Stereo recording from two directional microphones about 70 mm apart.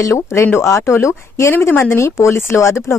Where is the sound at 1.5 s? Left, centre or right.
Left.